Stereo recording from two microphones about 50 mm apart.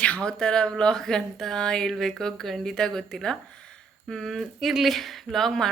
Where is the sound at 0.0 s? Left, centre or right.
Centre.